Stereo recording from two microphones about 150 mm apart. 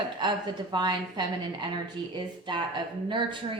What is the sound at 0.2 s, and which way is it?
A woman's voice, 30° right (ahead or behind).